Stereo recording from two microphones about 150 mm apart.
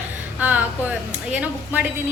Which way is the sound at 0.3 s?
10° right (ahead or behind).